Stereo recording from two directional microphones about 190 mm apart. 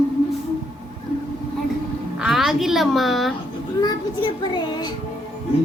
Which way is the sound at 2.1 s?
Centre (ahead or behind).